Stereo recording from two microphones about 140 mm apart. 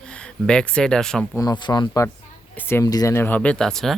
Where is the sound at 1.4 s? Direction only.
30° left (ahead or behind).